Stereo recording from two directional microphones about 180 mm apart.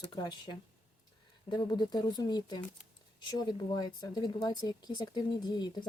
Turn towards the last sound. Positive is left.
turn(degrees=25)  # may be behind; listen again after turning